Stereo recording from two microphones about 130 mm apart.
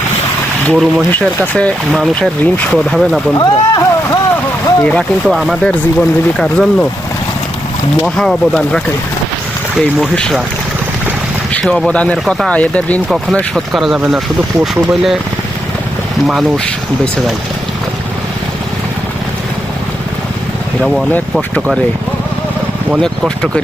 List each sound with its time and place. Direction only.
0.7 s speech: 5° left (ahead or behind)
2.4 s speech: 10° left (ahead or behind)
2.7 s speech: centre (ahead or behind)
3.3 s speech: 25° left (ahead or behind)
4.8 s speech: 10° left (ahead or behind)
5.3 s speech: centre (ahead or behind)
8.0 s speech: 5° left (ahead or behind)
10.0 s speech: centre (ahead or behind)
11.5 s speech: 5° left (ahead or behind)
13.3 s speech: centre (ahead or behind)